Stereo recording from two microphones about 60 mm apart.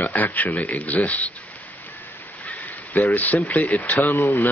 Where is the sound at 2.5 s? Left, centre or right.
Left.